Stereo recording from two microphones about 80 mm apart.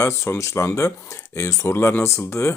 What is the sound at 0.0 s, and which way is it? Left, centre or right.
Speech, left.